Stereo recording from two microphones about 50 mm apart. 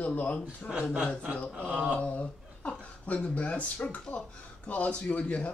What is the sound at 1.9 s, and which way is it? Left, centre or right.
Speech, left.